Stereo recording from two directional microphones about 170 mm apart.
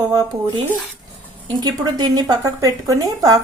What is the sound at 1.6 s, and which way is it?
A woman's voice, 25° right (ahead or behind).